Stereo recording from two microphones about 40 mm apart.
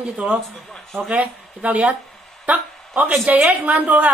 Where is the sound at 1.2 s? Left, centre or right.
Right.